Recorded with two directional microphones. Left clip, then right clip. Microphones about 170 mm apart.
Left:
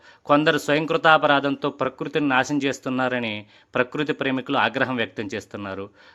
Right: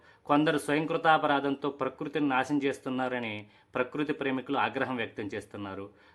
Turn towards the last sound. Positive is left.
turn(degrees=25)  # may be behind; listen again after turning